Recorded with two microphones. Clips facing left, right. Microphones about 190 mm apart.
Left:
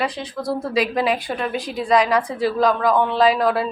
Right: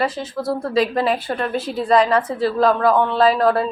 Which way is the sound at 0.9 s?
15° left (ahead or behind).